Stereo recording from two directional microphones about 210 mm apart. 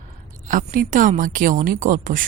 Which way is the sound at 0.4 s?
40° right (ahead or behind).